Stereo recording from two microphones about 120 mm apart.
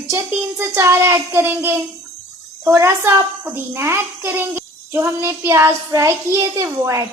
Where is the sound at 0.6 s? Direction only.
20° right (ahead or behind).